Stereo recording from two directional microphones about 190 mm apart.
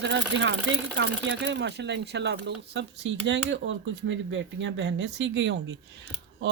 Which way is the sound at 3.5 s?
80° right.